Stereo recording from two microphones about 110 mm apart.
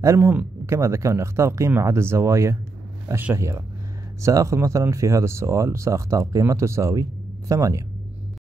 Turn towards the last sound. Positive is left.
turn(degrees=-30)  # may be behind; listen again after turning